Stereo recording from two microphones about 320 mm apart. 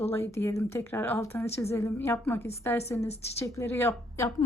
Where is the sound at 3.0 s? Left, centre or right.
Centre.